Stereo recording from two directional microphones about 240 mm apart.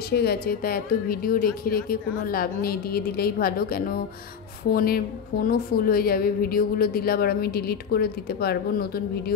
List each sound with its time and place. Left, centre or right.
0.1 s a woman's voice: left